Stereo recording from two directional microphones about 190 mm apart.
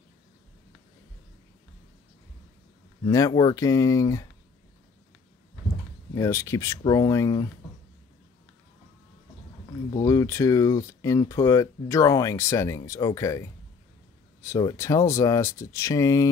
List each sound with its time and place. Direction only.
3.1 s speech: 15° left (ahead or behind)
6.1 s speech: 15° left (ahead or behind)
10.0 s speech: 15° left (ahead or behind)